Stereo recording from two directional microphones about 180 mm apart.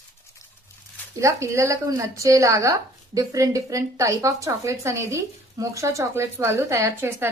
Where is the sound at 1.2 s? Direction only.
15° right (ahead or behind).